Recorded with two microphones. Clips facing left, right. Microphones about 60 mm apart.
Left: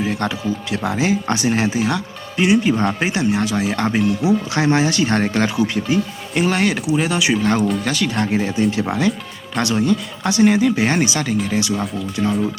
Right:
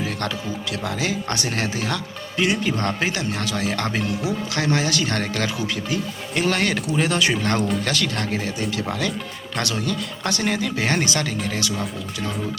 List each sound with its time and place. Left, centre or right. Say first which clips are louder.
0.0 s speech: left 5 dB; centre
4.2 s speech: left 7 dB; left
6.3 s speech: left 4 dB; centre
11.6 s speech: left 5 dB; left